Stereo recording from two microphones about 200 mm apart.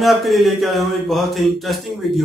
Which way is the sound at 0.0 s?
Centre (ahead or behind).